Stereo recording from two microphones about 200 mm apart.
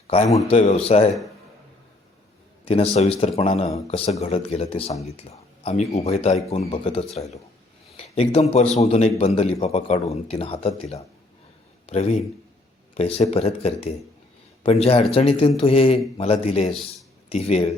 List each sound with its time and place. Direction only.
0.1 s speech: 30° left (ahead or behind)
2.6 s a man's voice: 30° left (ahead or behind)
11.9 s a man's voice: 30° left (ahead or behind)